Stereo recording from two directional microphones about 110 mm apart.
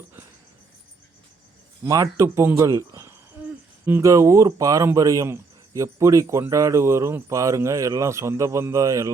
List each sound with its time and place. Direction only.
1.8 s speech: 30° right (ahead or behind)